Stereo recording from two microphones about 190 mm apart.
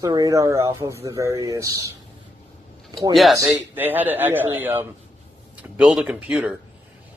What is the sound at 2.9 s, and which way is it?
Speech, 20° right (ahead or behind).